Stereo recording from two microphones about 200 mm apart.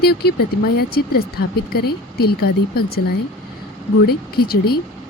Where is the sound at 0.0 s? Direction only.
50° left (ahead or behind).